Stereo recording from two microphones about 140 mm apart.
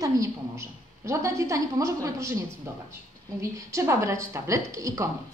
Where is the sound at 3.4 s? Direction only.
20° right (ahead or behind).